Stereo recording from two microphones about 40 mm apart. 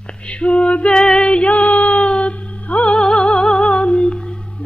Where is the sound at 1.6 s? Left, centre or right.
Left.